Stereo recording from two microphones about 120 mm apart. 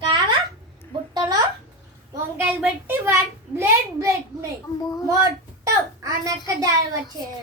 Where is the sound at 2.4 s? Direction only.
15° right (ahead or behind).